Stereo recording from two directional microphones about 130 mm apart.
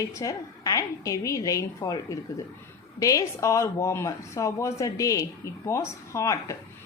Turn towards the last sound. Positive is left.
turn(degrees=25)  # may be behind; listen again after turning